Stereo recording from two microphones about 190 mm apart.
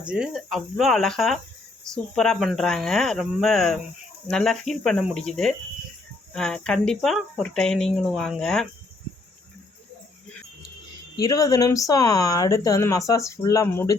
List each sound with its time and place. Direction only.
0.1 s speech: centre (ahead or behind)
11.2 s speech: 15° left (ahead or behind)